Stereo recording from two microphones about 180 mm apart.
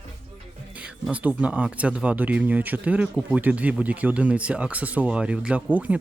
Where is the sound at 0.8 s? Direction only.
5° right (ahead or behind).